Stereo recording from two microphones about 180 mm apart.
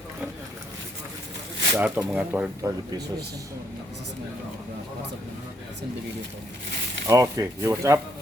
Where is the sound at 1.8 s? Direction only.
10° right (ahead or behind).